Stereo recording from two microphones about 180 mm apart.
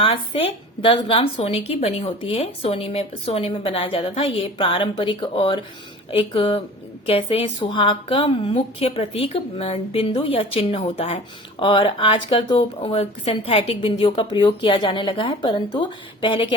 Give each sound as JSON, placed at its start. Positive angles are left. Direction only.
{"t": 0.0, "sound": "speech", "side_deg": 30}